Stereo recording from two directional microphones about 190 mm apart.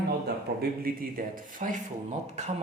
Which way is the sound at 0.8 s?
50° right (ahead or behind).